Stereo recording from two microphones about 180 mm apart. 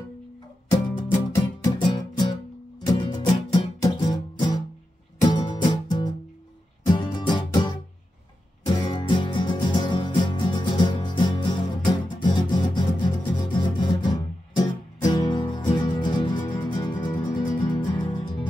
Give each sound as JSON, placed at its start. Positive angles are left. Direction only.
{"t": 0.7, "sound": "music", "side_deg": 25}